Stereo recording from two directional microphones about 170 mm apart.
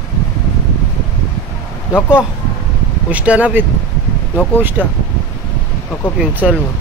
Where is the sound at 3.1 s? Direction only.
10° right (ahead or behind).